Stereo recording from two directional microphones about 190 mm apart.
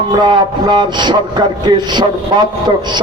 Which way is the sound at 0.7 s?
25° right (ahead or behind).